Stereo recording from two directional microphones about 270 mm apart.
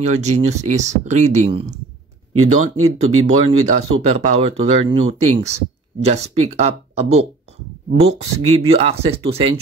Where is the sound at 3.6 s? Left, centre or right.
Right.